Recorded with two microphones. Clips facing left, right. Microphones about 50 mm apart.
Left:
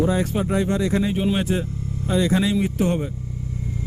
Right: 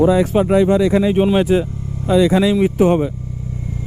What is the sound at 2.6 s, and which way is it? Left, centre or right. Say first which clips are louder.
Speech: right 8 dB; right.